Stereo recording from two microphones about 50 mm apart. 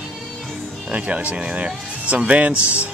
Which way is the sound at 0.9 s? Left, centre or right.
Right.